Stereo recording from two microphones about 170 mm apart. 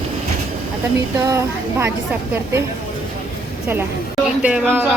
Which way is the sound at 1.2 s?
20° right (ahead or behind).